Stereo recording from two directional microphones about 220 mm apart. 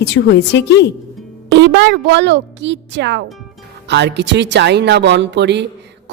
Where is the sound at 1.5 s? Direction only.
55° right (ahead or behind).